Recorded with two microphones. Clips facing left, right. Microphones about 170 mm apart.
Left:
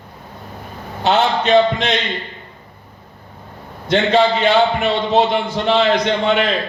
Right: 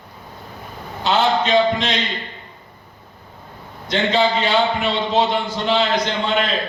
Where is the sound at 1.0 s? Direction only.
60° left (ahead or behind).